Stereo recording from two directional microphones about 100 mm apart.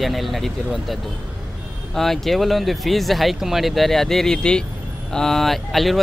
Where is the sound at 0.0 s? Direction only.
Centre (ahead or behind).